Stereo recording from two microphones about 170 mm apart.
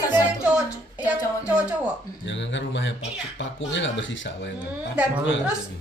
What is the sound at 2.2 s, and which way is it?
Speech, 90° left.